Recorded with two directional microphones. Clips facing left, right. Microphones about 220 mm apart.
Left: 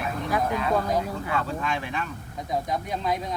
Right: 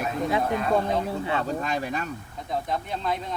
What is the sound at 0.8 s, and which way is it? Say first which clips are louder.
Speech: right 1 dB; 25° right (ahead or behind).